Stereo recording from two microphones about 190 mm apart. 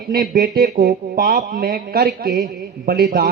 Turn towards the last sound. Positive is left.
turn(degrees=-55)  # may be behind; listen again after turning